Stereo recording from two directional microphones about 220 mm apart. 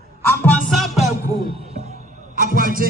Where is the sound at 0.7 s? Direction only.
Centre (ahead or behind).